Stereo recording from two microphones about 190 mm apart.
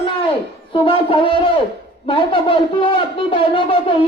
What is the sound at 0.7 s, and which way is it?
Speech, 25° left (ahead or behind).